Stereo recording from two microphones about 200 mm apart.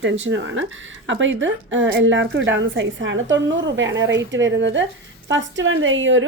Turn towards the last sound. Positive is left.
turn(degrees=-70)  # may be behind; listen again after turning